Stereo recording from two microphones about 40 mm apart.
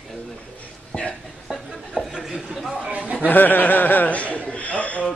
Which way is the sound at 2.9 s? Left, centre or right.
Right.